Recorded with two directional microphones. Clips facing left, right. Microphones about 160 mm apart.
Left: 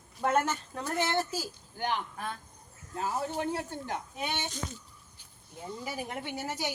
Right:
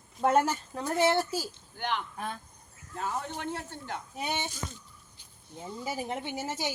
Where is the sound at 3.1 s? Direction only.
15° left (ahead or behind).